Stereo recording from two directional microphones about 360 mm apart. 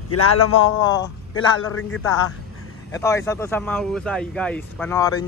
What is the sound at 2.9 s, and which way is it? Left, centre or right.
Speech, centre.